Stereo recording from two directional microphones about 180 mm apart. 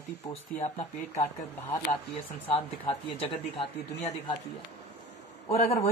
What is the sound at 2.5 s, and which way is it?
Speech, 30° left (ahead or behind).